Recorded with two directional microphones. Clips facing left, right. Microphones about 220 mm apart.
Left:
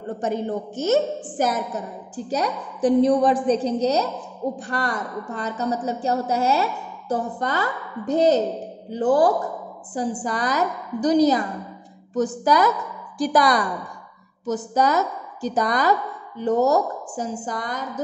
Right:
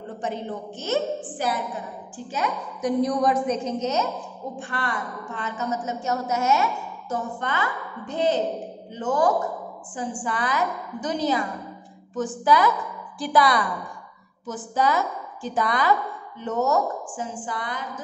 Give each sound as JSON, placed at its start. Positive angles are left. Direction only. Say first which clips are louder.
{"t": 0.2, "sound": "a woman's voice", "louder": "left 5 dB", "side_deg": 45}